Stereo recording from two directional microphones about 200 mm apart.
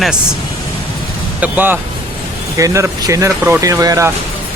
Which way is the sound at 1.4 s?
10° right (ahead or behind).